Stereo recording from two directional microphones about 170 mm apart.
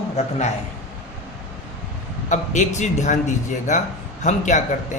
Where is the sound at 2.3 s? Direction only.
45° left (ahead or behind).